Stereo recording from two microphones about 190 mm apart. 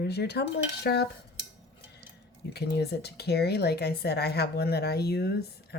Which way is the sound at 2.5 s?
60° left (ahead or behind).